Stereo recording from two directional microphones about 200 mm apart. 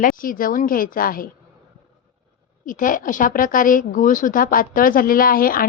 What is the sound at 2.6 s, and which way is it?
A woman's voice, 40° left (ahead or behind).